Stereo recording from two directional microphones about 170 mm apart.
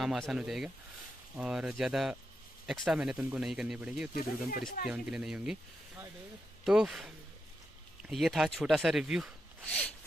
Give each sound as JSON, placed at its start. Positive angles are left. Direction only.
{"t": 0.0, "sound": "speech", "side_deg": 0}
{"t": 4.1, "sound": "speech", "side_deg": 60}
{"t": 4.9, "sound": "speech", "side_deg": -5}
{"t": 6.7, "sound": "speech", "side_deg": 0}
{"t": 9.6, "sound": "zipper", "side_deg": 10}